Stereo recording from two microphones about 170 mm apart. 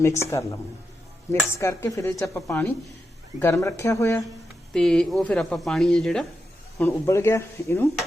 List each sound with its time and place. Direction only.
0.0 s speech: 15° left (ahead or behind)
4.7 s speech: 5° left (ahead or behind)
6.8 s speech: 15° left (ahead or behind)